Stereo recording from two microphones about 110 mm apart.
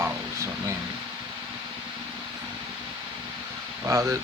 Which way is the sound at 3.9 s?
30° right (ahead or behind).